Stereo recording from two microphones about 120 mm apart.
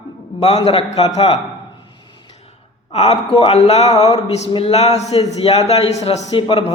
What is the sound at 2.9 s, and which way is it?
Speech, 55° left (ahead or behind).